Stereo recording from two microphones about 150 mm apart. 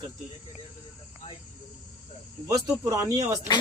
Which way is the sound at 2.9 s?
25° right (ahead or behind).